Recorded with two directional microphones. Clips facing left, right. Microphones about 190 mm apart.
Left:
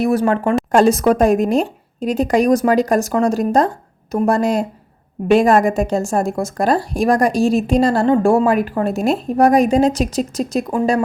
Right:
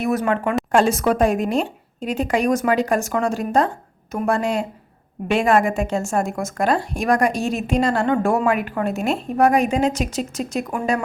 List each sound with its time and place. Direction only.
0.0 s a woman's voice: 35° left (ahead or behind)